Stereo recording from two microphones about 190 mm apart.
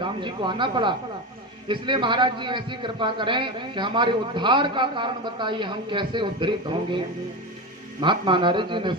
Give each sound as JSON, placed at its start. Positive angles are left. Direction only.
{"t": 0.0, "sound": "a man's voice", "side_deg": -25}
{"t": 8.0, "sound": "a man's voice", "side_deg": -25}